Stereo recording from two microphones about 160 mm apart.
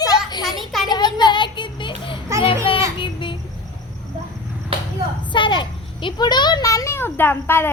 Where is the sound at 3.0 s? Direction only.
30° left (ahead or behind).